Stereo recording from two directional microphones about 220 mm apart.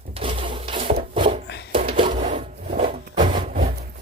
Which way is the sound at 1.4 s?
50° left (ahead or behind).